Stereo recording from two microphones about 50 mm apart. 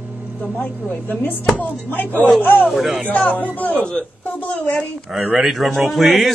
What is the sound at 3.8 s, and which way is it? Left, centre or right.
Speech, left.